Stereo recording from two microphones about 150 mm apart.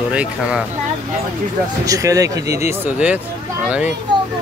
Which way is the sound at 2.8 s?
10° right (ahead or behind).